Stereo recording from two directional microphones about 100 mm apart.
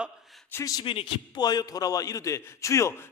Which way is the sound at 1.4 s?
40° left (ahead or behind).